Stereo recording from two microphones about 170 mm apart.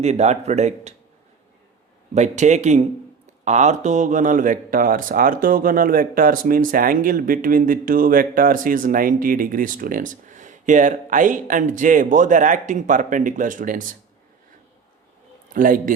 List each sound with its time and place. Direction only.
0.0 s speech: 40° right (ahead or behind)
2.1 s speech: 45° right (ahead or behind)
15.5 s speech: 55° right (ahead or behind)